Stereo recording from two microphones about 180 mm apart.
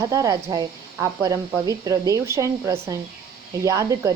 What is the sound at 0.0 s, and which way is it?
Speech, 20° right (ahead or behind).